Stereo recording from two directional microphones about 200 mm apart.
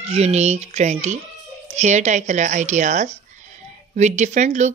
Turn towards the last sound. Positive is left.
turn(degrees=-35)  # may be behind; listen again after turning